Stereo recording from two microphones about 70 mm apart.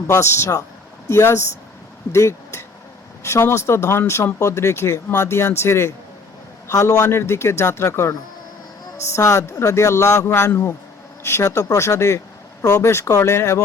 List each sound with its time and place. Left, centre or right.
0.1 s speech: left